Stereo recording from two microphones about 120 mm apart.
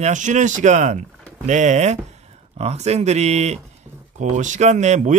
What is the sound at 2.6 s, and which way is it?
Speech, 60° right (ahead or behind).